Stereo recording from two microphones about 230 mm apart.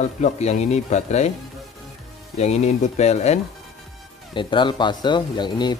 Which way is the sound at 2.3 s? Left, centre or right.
Left.